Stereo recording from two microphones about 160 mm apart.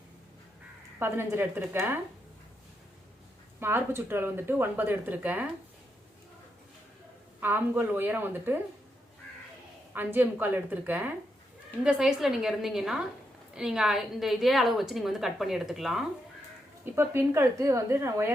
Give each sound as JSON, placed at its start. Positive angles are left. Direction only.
{"t": 0.9, "sound": "speech", "side_deg": -15}
{"t": 3.6, "sound": "speech", "side_deg": -15}
{"t": 7.4, "sound": "speech", "side_deg": -15}
{"t": 9.9, "sound": "a woman's voice", "side_deg": -10}
{"t": 16.8, "sound": "speech", "side_deg": -15}